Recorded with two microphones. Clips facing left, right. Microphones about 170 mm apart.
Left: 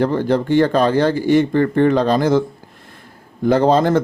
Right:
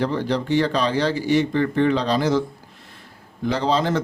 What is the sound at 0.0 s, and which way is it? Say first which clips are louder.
Speech: left 6 dB; 50° left (ahead or behind).